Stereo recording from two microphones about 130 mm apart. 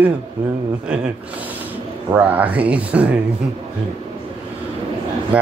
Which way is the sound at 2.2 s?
10° right (ahead or behind).